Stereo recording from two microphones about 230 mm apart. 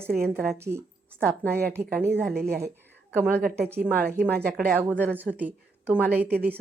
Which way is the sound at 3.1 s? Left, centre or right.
Centre.